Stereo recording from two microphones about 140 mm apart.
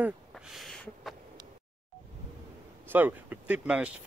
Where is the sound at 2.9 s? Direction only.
10° right (ahead or behind).